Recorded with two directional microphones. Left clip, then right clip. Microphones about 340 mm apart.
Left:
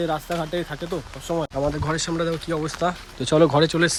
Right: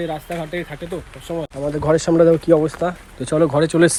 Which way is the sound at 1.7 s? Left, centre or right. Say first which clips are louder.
Right 10 dB; centre.